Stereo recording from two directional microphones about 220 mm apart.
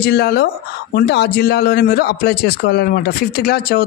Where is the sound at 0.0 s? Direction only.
45° left (ahead or behind).